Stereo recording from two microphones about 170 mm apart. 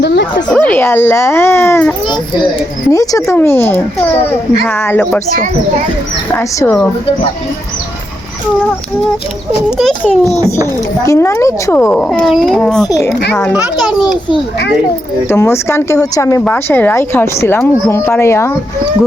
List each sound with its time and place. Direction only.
0.0 s speech: 85° left
0.6 s speech: 10° left (ahead or behind)
6.3 s speech: 15° left (ahead or behind)
9.7 s a child's voice: centre (ahead or behind)
11.0 s speech: 15° left (ahead or behind)
12.8 s a child's voice: 20° left (ahead or behind)
13.8 s a child's voice: centre (ahead or behind)
15.3 s speech: 15° left (ahead or behind)